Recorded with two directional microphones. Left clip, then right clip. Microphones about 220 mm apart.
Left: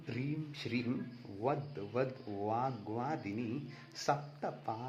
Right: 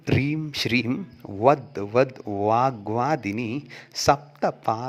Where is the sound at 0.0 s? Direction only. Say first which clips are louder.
Right 16 dB; 45° right (ahead or behind).